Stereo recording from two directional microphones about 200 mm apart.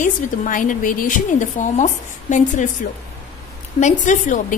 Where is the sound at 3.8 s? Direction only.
40° left (ahead or behind).